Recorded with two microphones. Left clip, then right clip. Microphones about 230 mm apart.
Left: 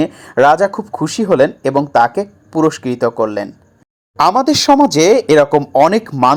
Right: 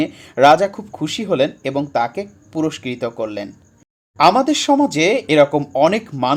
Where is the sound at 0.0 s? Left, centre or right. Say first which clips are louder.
Left 2 dB; centre.